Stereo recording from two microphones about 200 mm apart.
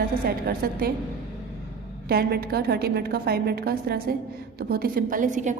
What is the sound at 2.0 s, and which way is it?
A woman's voice, 50° right (ahead or behind).